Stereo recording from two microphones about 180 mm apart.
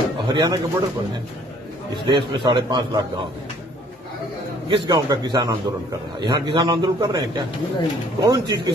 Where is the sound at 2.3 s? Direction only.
25° right (ahead or behind).